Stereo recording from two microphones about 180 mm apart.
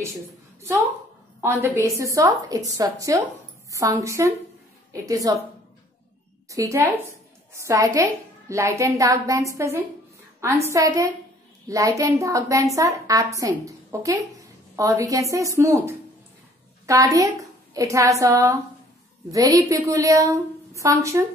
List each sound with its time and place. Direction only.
1.4 s a woman's voice: 15° right (ahead or behind)
6.5 s a woman's voice: 15° right (ahead or behind)